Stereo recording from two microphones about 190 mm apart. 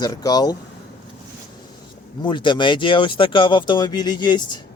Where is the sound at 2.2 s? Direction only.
25° left (ahead or behind).